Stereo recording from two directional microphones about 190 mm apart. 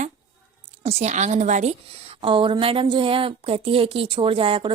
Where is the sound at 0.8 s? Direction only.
35° right (ahead or behind).